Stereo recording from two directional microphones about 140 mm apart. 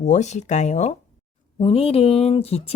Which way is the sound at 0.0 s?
55° left (ahead or behind).